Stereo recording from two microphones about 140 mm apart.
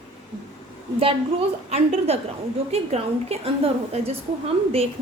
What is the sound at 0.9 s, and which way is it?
A woman's voice, 45° right (ahead or behind).